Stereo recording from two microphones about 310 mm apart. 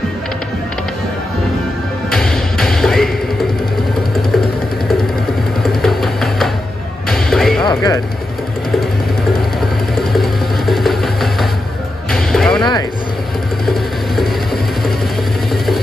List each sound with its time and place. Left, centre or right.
2.0 s music: centre
5.6 s music: centre
7.6 s music: centre
9.9 s music: centre
14.1 s a sound: centre
15.5 s music: centre